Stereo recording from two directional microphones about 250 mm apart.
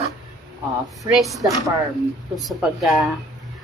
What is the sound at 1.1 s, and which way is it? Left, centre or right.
Speech, centre.